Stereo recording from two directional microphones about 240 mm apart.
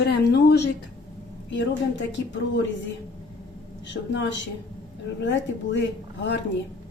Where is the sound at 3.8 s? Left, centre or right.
Left.